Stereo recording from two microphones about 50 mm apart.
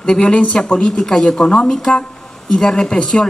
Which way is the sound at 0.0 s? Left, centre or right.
Centre.